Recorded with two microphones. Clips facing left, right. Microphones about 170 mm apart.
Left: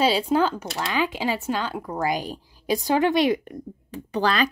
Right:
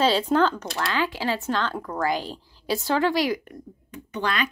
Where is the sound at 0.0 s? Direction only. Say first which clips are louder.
Even; 10° left (ahead or behind).